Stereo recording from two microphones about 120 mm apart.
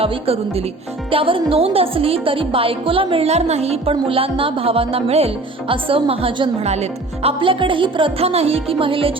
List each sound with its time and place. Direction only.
0.0 s a woman's voice: 55° right (ahead or behind)